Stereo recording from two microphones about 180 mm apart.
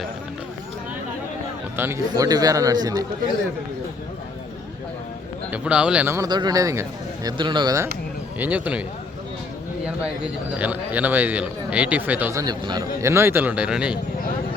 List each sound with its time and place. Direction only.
1.7 s speech: 15° right (ahead or behind)
5.5 s speech: 5° right (ahead or behind); by 7.9 s 20° right (ahead or behind)
8.4 s speech: 10° right (ahead or behind)
9.8 s speech: 5° right (ahead or behind)